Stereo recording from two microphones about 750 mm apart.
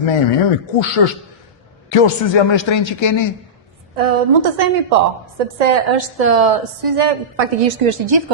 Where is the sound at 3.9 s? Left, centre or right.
Right.